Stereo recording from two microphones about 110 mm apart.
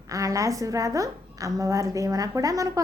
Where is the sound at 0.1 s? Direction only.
30° right (ahead or behind).